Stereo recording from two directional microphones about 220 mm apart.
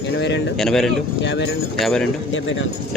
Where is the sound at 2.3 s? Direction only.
60° left (ahead or behind).